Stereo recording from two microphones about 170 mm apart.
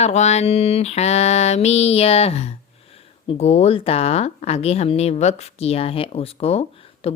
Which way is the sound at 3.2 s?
40° left (ahead or behind).